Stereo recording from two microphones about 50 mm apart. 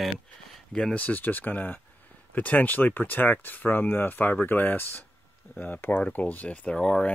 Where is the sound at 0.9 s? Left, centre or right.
Left.